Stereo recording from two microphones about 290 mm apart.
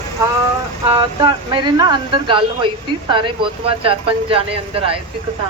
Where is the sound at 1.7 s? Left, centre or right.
Centre.